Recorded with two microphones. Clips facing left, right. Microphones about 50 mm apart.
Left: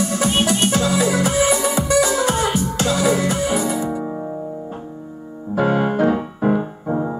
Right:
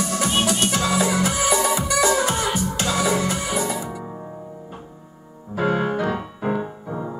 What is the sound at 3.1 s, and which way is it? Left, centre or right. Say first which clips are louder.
Music: left 4 dB; left.